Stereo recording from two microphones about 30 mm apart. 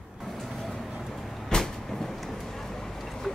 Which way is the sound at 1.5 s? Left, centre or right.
Left.